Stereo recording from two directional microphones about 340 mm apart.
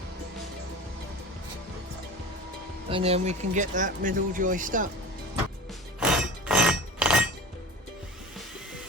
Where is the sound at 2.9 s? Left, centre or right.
Centre.